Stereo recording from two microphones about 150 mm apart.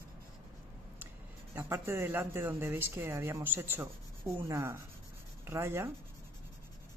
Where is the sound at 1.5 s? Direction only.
15° right (ahead or behind).